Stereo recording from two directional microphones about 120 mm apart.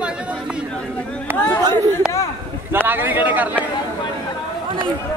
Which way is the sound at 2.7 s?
15° right (ahead or behind).